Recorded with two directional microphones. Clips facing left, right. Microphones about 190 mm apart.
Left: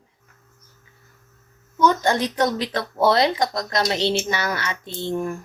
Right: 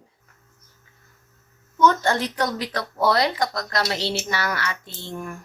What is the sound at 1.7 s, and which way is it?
Speech, 10° left (ahead or behind).